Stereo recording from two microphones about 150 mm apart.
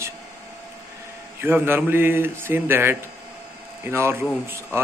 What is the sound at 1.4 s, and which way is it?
A man's voice, 15° right (ahead or behind).